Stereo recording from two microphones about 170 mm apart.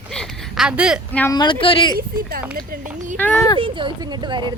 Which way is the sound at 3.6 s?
30° right (ahead or behind).